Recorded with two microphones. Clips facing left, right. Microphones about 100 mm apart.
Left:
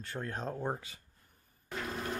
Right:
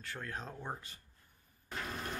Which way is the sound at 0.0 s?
30° left (ahead or behind).